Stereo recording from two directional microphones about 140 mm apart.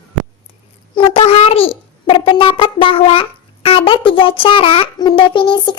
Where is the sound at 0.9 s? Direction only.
40° left (ahead or behind).